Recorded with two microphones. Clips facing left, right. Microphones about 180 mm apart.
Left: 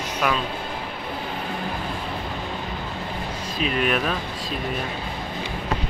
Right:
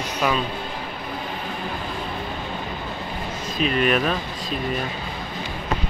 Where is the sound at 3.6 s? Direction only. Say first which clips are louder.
Right 3 dB; 5° left (ahead or behind).